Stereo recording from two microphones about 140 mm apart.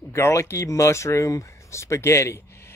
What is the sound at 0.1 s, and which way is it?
Speech, 20° left (ahead or behind).